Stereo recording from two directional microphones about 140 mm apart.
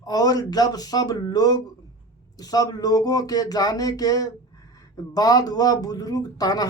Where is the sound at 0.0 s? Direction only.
25° left (ahead or behind).